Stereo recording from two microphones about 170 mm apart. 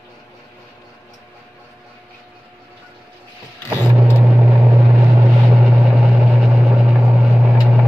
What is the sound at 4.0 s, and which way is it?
Vehicle, 10° right (ahead or behind).